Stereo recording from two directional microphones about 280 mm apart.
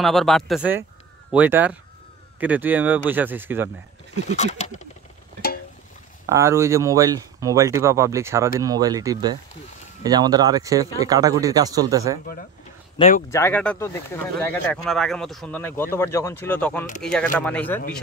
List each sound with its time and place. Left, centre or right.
0.0 s speech: centre
4.3 s speech: left
6.2 s speech: centre
12.9 s speech: left
13.3 s speech: centre